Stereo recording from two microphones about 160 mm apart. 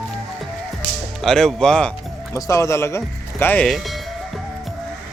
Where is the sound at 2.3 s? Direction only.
20° left (ahead or behind).